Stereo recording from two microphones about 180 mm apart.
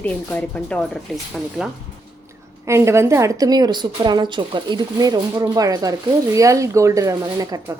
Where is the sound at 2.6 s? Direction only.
15° right (ahead or behind).